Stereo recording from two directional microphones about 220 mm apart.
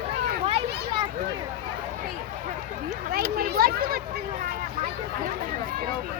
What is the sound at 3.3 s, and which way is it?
Speech, 45° right (ahead or behind).